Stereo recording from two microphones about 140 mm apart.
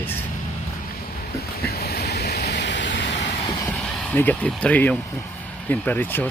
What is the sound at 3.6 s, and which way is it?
Vehicle, 10° left (ahead or behind).